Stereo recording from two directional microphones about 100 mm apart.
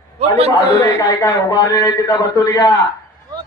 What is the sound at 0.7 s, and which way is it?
A man's voice, 30° left (ahead or behind).